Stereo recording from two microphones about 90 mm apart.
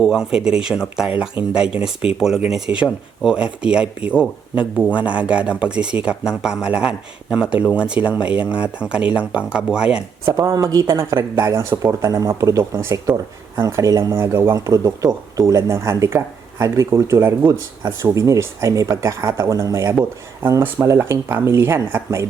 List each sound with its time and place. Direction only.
0.0 s speech: 5° right (ahead or behind)
10.3 s speech: 40° right (ahead or behind)